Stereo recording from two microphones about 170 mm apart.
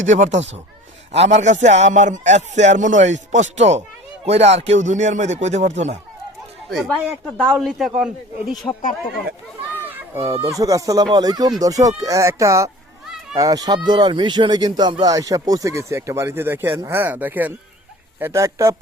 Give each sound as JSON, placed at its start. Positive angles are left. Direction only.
{"t": 0.0, "sound": "a man's voice", "side_deg": -45}
{"t": 6.7, "sound": "a man's voice", "side_deg": 0}
{"t": 10.6, "sound": "speech", "side_deg": -20}